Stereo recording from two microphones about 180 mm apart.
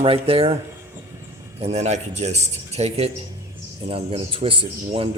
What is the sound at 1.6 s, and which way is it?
A man's voice, 35° right (ahead or behind).